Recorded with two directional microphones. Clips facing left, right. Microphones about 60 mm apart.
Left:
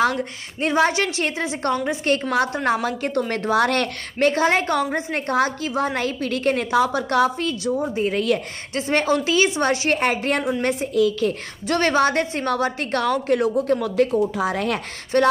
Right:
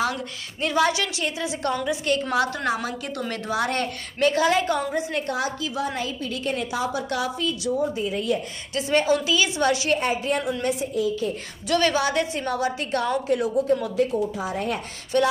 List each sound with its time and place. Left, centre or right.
0.0 s a woman's voice: left
4.2 s a woman's voice: left
7.9 s a woman's voice: left
8.7 s a woman's voice: left
9.9 s a woman's voice: left
10.6 s a woman's voice: left
11.0 s speech: left
11.6 s a woman's voice: left
14.3 s speech: left
15.1 s a woman's voice: left